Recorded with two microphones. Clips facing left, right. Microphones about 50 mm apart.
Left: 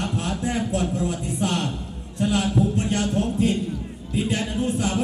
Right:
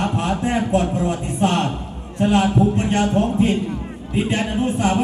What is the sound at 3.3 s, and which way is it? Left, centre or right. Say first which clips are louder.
A man's voice: right 4 dB; right.